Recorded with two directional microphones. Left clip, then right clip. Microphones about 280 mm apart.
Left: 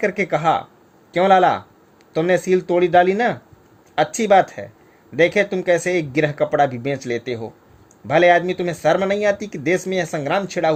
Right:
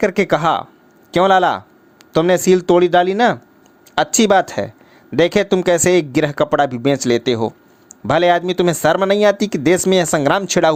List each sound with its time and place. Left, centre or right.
0.0 s speech: centre